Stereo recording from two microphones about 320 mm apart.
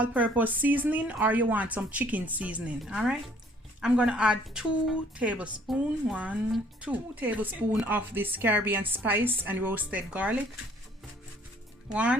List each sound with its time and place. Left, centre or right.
0.0 s speech: centre
11.9 s speech: centre